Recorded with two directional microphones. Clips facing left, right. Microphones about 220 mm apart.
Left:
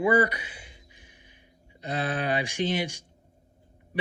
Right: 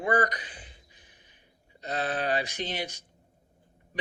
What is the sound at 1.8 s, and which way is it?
Speech, 10° left (ahead or behind).